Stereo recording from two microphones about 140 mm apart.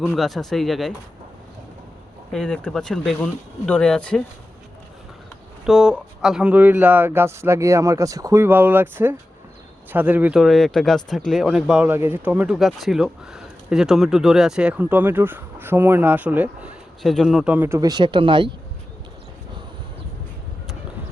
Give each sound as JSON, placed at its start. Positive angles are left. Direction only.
{"t": 0.2, "sound": "speech", "side_deg": 0}
{"t": 2.3, "sound": "speech", "side_deg": 5}
{"t": 5.6, "sound": "speech", "side_deg": -5}
{"t": 10.4, "sound": "speech", "side_deg": 0}
{"t": 17.0, "sound": "speech", "side_deg": 0}
{"t": 17.7, "sound": "speech", "side_deg": -30}